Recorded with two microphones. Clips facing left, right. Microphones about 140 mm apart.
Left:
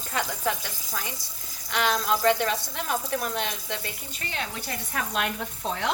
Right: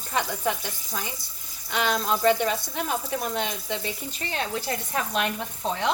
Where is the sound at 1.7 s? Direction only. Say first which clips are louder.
Even; 20° right (ahead or behind).